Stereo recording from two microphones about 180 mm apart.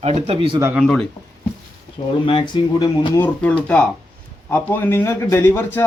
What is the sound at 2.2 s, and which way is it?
Speech, 25° left (ahead or behind).